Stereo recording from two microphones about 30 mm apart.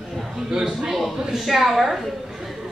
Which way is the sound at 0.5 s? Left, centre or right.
Centre.